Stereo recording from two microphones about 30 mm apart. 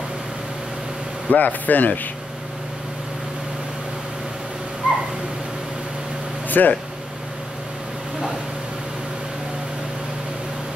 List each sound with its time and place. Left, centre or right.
1.3 s speech: left
4.8 s owl: right
6.5 s speech: left